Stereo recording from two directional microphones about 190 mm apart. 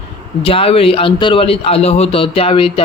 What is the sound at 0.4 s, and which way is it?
A man's voice, 30° left (ahead or behind).